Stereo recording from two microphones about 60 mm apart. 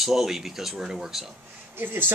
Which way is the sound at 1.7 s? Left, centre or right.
Right.